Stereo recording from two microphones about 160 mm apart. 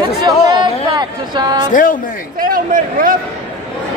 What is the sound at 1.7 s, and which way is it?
Speech, 55° left (ahead or behind).